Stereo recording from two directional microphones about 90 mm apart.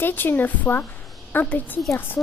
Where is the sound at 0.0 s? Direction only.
20° left (ahead or behind).